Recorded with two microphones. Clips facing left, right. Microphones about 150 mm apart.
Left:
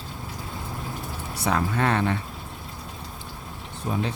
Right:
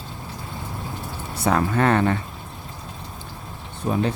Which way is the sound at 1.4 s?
50° right (ahead or behind).